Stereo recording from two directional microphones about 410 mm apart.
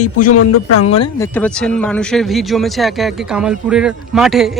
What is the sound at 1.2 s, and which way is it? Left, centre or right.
A man's voice, centre.